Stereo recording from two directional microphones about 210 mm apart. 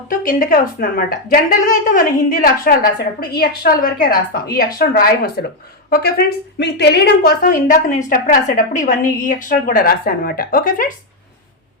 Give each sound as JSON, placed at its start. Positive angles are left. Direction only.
{"t": 0.1, "sound": "a woman's voice", "side_deg": 40}